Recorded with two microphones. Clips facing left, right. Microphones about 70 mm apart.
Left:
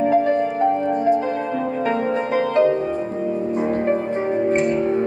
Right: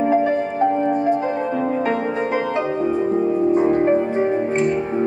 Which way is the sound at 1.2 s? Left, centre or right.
Right.